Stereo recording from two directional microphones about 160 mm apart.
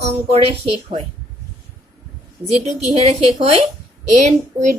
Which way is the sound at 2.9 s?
40° right (ahead or behind).